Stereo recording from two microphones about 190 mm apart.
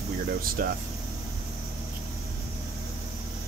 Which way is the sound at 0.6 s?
50° right (ahead or behind).